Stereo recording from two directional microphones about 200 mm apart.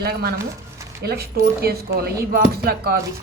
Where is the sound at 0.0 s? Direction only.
50° right (ahead or behind).